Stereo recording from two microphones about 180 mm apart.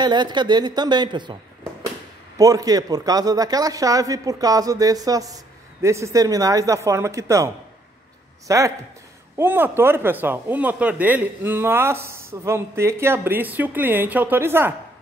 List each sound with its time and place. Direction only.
0.0 s a man's voice: 25° right (ahead or behind)
2.3 s a man's voice: 20° right (ahead or behind)